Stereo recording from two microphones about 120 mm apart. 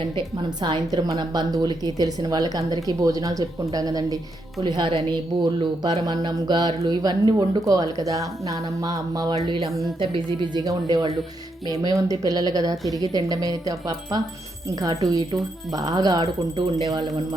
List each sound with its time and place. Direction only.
0.6 s a woman's voice: 35° right (ahead or behind)
4.8 s a woman's voice: 50° right (ahead or behind); by 9.2 s 30° right (ahead or behind)
9.6 s a woman's voice: centre (ahead or behind)
10.0 s a woman's voice: 40° right (ahead or behind)